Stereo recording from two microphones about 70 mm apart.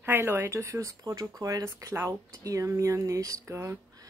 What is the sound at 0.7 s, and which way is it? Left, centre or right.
Speech, right.